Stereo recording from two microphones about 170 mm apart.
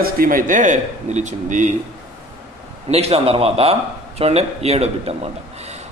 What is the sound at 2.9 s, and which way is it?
Speech, 35° right (ahead or behind).